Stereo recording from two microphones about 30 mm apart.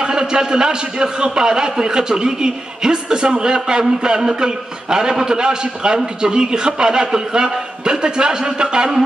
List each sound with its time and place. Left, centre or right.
0.0 s a man's voice: right